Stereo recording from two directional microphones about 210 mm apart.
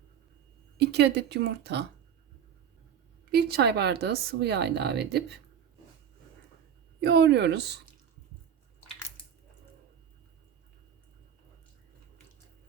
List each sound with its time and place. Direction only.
0.8 s a woman's voice: 50° right (ahead or behind)
3.3 s a woman's voice: 50° right (ahead or behind)
7.0 s a woman's voice: 50° right (ahead or behind)